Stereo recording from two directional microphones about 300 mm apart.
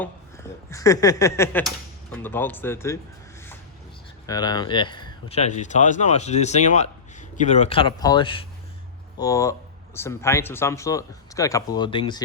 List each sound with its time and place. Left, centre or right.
0.0 s speech: centre
4.3 s speech: centre